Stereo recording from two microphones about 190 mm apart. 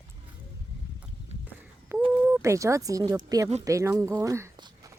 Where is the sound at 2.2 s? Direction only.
15° right (ahead or behind).